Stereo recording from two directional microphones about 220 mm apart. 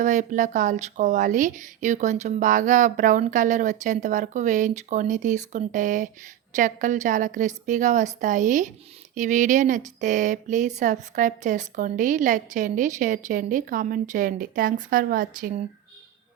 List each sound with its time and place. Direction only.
0.0 s speech: 35° right (ahead or behind)